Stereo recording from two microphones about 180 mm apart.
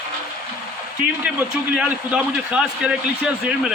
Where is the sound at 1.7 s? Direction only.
5° right (ahead or behind).